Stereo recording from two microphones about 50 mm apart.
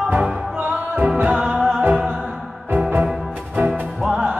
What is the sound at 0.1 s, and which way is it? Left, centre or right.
Music, right.